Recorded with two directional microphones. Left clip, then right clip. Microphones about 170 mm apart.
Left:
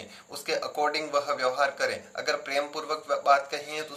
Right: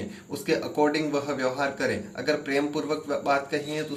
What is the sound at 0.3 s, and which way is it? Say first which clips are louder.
A man's voice: right 3 dB; 20° left (ahead or behind).